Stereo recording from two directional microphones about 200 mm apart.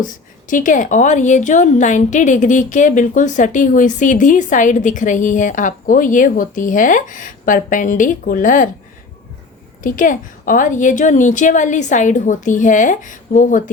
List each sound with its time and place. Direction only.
0.0 s a woman's voice: 40° left (ahead or behind)
9.8 s a woman's voice: 40° left (ahead or behind)